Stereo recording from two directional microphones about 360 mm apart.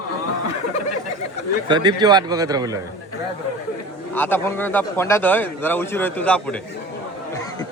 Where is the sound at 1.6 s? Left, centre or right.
Centre.